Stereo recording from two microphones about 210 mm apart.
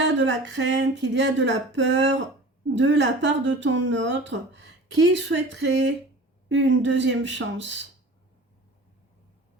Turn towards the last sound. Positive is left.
turn(degrees=-60)  # may be behind; listen again after turning